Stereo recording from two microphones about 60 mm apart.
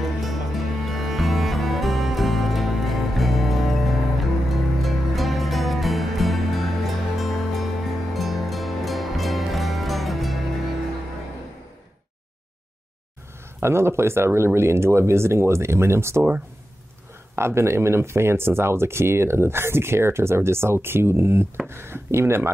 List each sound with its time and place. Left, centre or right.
0.0 s music: centre
13.6 s speech: right
17.4 s speech: right